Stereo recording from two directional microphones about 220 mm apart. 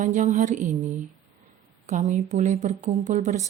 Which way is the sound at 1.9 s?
35° right (ahead or behind).